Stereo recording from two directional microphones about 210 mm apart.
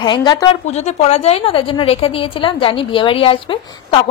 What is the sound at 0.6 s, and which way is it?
A woman's voice, 30° left (ahead or behind).